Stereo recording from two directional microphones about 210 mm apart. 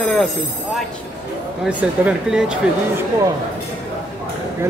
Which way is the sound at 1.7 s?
5° right (ahead or behind).